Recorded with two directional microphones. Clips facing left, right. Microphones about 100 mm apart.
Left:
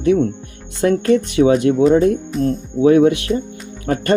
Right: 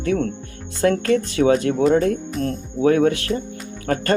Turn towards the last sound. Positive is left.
turn(degrees=25)  # may be behind; listen again after turning